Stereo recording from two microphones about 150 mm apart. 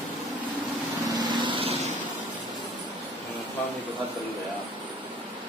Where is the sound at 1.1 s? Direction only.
30° right (ahead or behind).